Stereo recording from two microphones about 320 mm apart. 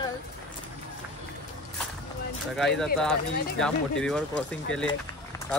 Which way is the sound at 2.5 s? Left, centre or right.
Centre.